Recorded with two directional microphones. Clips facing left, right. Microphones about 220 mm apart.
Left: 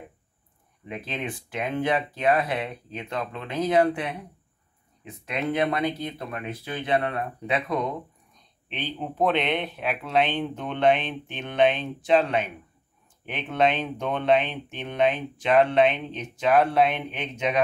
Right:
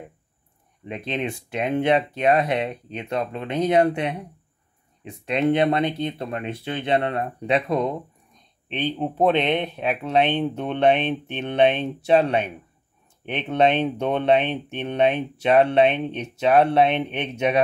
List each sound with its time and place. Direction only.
0.8 s speech: 25° right (ahead or behind)
5.2 s speech: 30° right (ahead or behind)